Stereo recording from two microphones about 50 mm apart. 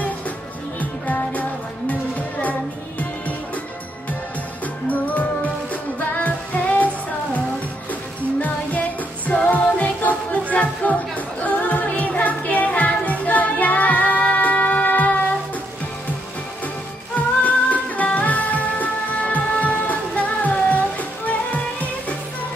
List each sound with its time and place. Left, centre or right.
0.7 s music: left
4.8 s music: left
8.4 s music: left
17.4 s music: left